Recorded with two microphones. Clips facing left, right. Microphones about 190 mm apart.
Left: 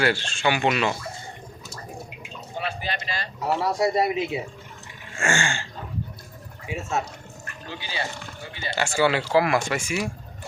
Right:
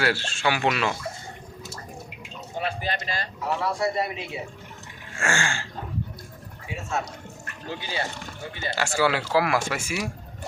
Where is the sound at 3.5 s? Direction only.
40° left (ahead or behind).